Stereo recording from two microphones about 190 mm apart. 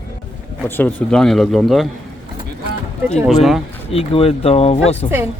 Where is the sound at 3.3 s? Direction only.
Centre (ahead or behind).